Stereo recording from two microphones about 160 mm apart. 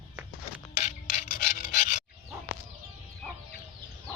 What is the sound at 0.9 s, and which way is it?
Filing, 50° left (ahead or behind).